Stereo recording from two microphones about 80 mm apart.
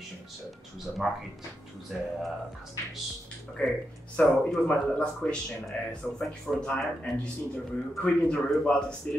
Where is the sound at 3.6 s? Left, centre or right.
Centre.